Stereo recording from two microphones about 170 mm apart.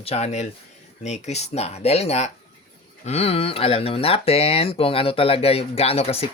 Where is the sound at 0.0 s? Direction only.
40° left (ahead or behind).